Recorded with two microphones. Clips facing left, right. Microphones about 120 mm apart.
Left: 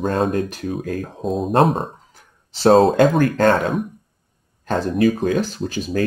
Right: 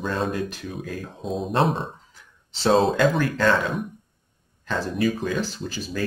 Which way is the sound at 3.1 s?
50° left (ahead or behind).